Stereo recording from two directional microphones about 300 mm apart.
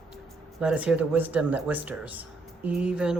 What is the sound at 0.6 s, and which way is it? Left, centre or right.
Speech, centre.